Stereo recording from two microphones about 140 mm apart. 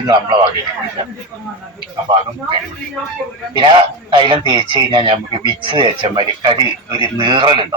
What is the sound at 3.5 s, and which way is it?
Speech, 35° right (ahead or behind).